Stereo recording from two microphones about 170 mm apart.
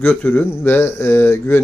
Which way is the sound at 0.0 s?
10° left (ahead or behind).